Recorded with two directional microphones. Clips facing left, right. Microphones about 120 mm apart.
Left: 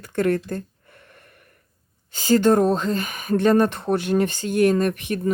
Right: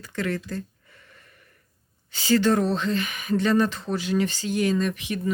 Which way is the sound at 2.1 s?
45° left (ahead or behind).